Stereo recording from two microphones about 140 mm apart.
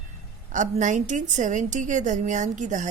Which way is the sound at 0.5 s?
60° right (ahead or behind).